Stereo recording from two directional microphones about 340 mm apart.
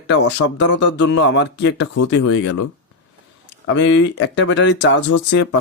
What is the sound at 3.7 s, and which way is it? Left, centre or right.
Speech, left.